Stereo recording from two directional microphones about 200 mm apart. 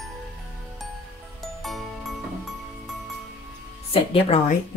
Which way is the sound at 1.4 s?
Centre (ahead or behind).